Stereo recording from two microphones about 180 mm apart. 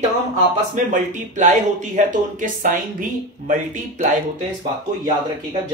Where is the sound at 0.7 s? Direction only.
45° right (ahead or behind).